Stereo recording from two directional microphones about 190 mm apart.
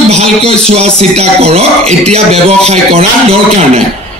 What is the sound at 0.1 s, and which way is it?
A man's voice, 30° right (ahead or behind).